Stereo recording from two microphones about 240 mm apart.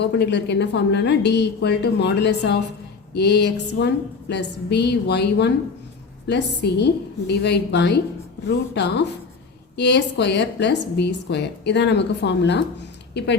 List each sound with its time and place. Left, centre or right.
0.0 s a woman's voice: left